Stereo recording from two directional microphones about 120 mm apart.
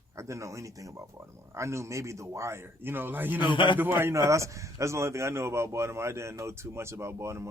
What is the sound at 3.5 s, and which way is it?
Speech, 45° left (ahead or behind).